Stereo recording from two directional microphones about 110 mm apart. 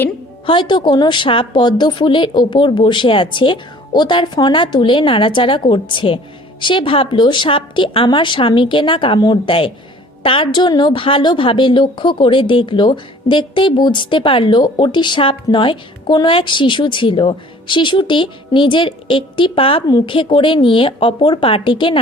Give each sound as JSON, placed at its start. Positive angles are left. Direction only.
{"t": 0.4, "sound": "a woman's voice", "side_deg": 45}